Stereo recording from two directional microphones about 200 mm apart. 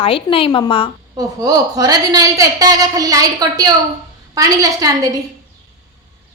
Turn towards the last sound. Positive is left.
turn(degrees=-20)  # may be behind; listen again after turning